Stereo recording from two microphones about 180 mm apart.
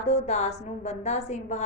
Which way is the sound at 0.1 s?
40° left (ahead or behind).